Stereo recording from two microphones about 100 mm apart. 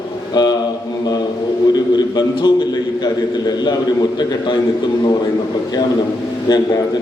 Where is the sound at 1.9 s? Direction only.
50° left (ahead or behind).